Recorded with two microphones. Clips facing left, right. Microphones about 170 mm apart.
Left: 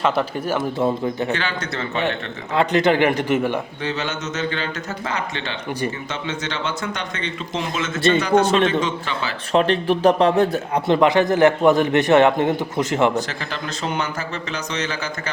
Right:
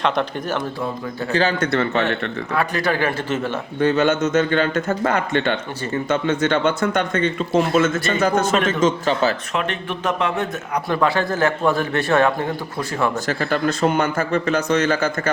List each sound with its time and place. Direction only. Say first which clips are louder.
0.0 s a man's voice: left 1 dB; 10° left (ahead or behind)
1.3 s a man's voice: right 5 dB; 40° right (ahead or behind)
1.5 s a man's voice: right 6 dB; 55° right (ahead or behind)
2.6 s a man's voice: left 5 dB; 20° left (ahead or behind)
3.8 s speech: right 9 dB; 50° right (ahead or behind)
7.9 s a man's voice: left 5 dB; 25° left (ahead or behind)
8.2 s speech: right 2 dB; 45° right (ahead or behind)
9.5 s speech: left 7 dB; 35° left (ahead or behind)
10.8 s a man's voice: left 4 dB; 20° left (ahead or behind)
13.1 s speech: right 4 dB; 50° right (ahead or behind)